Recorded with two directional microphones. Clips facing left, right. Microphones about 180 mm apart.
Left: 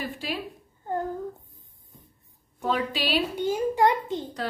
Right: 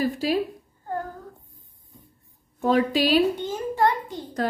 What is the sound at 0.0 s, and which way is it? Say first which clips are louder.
Speech: right 9 dB; 40° right (ahead or behind).